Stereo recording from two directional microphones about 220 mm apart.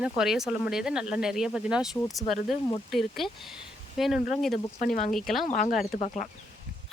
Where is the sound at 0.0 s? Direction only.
Centre (ahead or behind).